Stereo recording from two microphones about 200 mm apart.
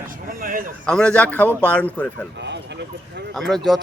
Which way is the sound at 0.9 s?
5° left (ahead or behind).